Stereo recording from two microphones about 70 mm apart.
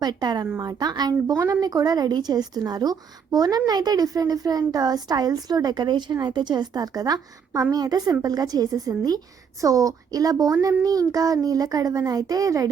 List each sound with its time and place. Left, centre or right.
0.0 s speech: right
0.6 s a woman's voice: right